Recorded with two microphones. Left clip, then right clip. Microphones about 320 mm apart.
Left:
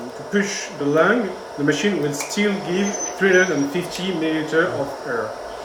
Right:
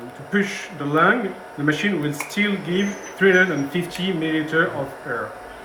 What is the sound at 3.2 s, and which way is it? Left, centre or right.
Speech, right.